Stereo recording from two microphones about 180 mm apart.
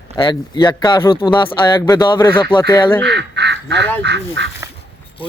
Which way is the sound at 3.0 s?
70° right (ahead or behind).